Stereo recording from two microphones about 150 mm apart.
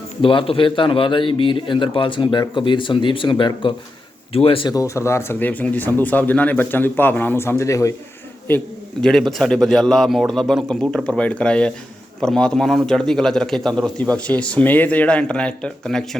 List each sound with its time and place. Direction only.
0.2 s a man's voice: 35° left (ahead or behind)
4.7 s speech: 20° left (ahead or behind)
8.4 s a man's voice: 10° left (ahead or behind)